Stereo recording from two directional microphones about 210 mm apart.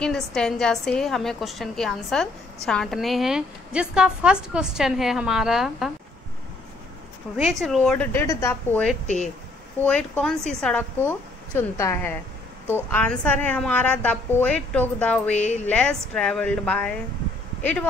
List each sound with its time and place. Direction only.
0.0 s a woman's voice: 5° left (ahead or behind)
7.3 s a woman's voice: centre (ahead or behind)
9.0 s speech: 35° left (ahead or behind)
9.8 s a woman's voice: 5° left (ahead or behind)